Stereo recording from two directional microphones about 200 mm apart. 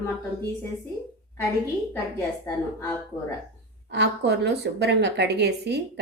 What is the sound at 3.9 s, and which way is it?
Speech, 60° right (ahead or behind).